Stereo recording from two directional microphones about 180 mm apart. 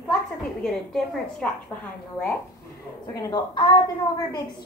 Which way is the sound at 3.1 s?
20° left (ahead or behind).